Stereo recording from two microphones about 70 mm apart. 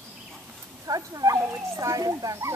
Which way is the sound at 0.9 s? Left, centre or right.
Right.